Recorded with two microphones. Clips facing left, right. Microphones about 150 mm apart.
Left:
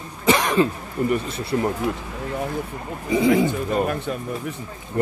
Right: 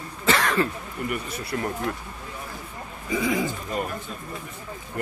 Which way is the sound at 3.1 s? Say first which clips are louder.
Left 7 dB; 25° left (ahead or behind).